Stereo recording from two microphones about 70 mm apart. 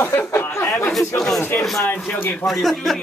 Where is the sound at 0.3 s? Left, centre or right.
Left.